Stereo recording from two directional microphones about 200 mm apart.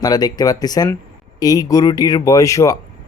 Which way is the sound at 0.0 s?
20° left (ahead or behind).